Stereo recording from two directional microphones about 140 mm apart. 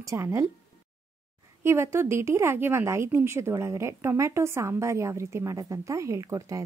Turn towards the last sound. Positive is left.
turn(degrees=-25)  # may be behind; listen again after turning